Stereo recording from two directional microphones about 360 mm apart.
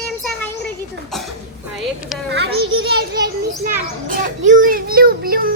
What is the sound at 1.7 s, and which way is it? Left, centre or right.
Speech, centre.